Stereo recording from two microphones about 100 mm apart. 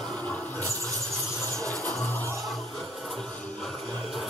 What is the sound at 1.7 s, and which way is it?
Music, 5° left (ahead or behind).